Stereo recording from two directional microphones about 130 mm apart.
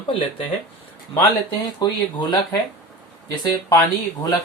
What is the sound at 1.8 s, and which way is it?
Speech, 30° left (ahead or behind).